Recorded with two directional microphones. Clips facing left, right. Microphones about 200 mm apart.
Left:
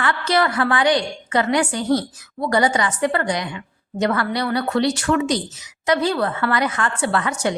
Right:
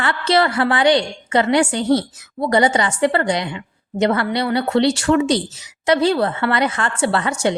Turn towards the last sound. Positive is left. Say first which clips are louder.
# right 3 dB
turn(degrees=-25)  # may be behind; listen again after turning